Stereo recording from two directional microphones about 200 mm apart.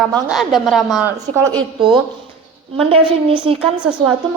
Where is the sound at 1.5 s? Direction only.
25° right (ahead or behind).